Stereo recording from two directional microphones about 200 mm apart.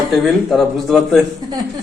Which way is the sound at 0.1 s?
Centre (ahead or behind).